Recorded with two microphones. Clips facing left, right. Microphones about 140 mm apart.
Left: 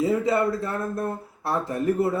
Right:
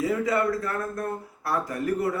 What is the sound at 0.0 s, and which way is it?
Speech, 25° left (ahead or behind).